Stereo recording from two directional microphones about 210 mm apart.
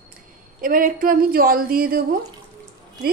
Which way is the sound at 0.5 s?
40° right (ahead or behind).